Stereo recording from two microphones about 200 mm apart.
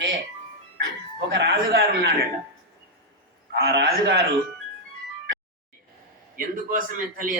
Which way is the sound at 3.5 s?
55° right (ahead or behind).